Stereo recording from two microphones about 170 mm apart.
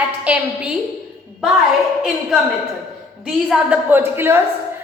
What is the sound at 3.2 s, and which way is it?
A woman's voice, 5° right (ahead or behind).